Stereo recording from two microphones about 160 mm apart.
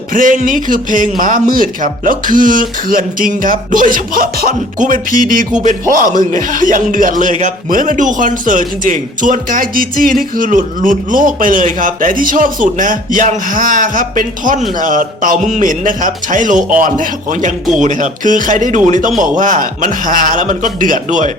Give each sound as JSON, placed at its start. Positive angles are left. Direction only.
{"t": 0.1, "sound": "a man's voice", "side_deg": -55}